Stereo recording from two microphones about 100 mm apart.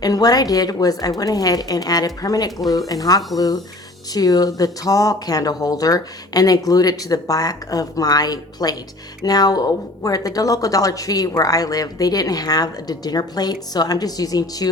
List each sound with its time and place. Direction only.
0.0 s speech: 40° left (ahead or behind)